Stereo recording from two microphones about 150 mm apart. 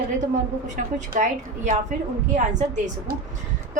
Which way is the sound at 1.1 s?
60° right (ahead or behind).